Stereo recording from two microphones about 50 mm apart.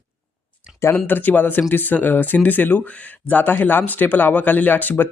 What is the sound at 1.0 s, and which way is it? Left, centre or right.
Speech, left.